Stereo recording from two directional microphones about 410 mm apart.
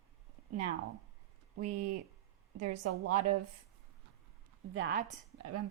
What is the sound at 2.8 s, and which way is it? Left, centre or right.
Speech, right.